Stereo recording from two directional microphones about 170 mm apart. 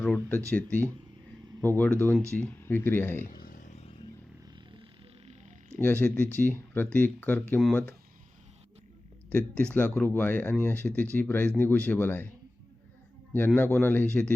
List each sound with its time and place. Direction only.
0.0 s speech: 10° left (ahead or behind)
3.4 s a sound: 50° left (ahead or behind)
4.8 s a sound: 35° right (ahead or behind)
5.7 s speech: 10° left (ahead or behind)
9.7 s speech: 10° left (ahead or behind)
13.6 s speech: 10° left (ahead or behind)